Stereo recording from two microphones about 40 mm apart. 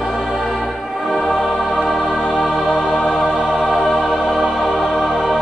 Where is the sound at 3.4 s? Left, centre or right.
Centre.